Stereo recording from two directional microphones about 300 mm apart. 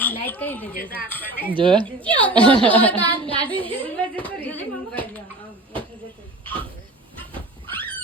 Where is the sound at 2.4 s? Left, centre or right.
Centre.